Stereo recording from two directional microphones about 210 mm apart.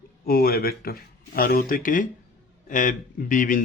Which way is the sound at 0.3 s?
45° left (ahead or behind).